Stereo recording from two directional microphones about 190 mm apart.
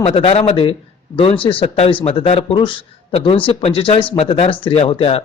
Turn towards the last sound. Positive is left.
turn(degrees=30)  # may be behind; listen again after turning